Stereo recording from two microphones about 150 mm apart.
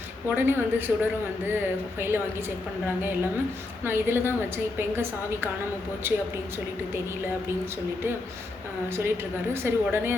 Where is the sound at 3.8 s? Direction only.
15° right (ahead or behind).